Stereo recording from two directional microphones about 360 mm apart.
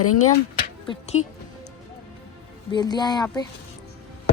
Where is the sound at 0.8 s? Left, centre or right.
Centre.